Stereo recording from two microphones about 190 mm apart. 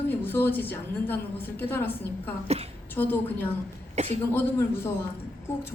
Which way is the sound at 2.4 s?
35° right (ahead or behind).